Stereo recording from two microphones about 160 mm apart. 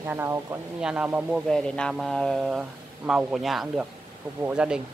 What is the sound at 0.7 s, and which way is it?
Speech, 5° right (ahead or behind).